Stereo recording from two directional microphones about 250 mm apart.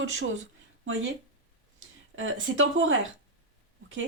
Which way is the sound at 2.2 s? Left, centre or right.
Right.